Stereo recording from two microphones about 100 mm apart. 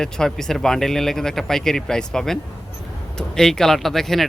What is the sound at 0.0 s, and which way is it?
Speech, 5° left (ahead or behind).